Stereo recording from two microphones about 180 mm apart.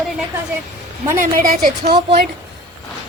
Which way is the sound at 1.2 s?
55° right (ahead or behind).